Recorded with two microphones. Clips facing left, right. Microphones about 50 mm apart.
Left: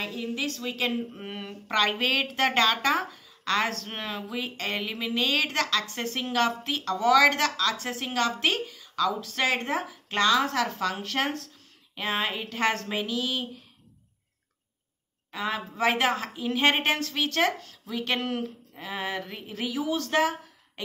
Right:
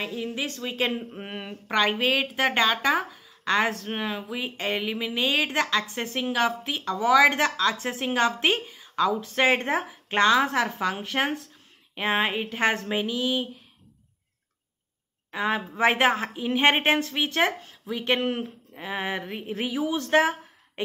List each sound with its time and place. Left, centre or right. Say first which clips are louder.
0.0 s a woman's voice: right 1 dB; centre
15.3 s a woman's voice: right 4 dB; right